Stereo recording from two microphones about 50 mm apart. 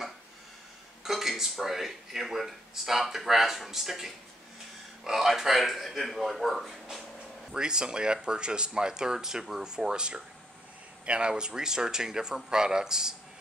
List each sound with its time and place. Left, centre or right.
1.0 s speech: centre
7.5 s speech: centre